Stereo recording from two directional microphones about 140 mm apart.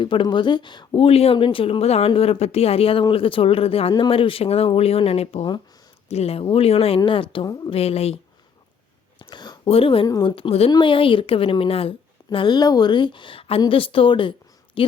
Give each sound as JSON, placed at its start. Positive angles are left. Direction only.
{"t": 0.0, "sound": "a woman's voice", "side_deg": 35}
{"t": 0.9, "sound": "a woman's voice", "side_deg": 45}
{"t": 9.1, "sound": "a sound", "side_deg": 35}
{"t": 9.7, "sound": "a woman's voice", "side_deg": 40}
{"t": 10.1, "sound": "speech", "side_deg": 25}
{"t": 10.3, "sound": "a woman's voice", "side_deg": 45}